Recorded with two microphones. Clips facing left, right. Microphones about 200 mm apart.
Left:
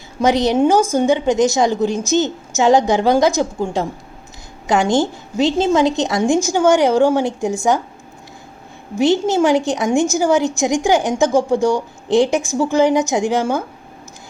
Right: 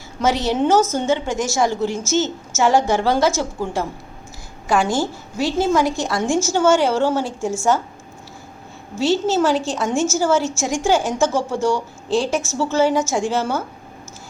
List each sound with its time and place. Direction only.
0.2 s a woman's voice: 15° left (ahead or behind)
9.0 s a woman's voice: 15° left (ahead or behind)